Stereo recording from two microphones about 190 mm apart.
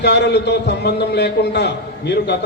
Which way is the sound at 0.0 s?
60° left (ahead or behind).